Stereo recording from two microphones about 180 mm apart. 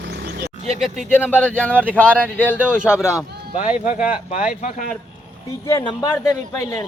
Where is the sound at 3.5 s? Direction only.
45° left (ahead or behind).